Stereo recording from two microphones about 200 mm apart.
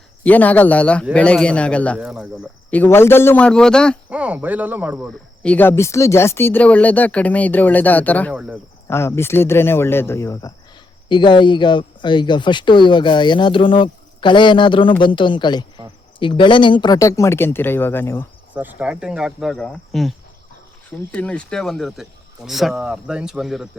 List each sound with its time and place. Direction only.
0.2 s speech: 10° left (ahead or behind)
4.1 s speech: 5° right (ahead or behind)
8.3 s speech: 5° right (ahead or behind)
8.9 s speech: 15° left (ahead or behind)
18.5 s speech: 10° right (ahead or behind)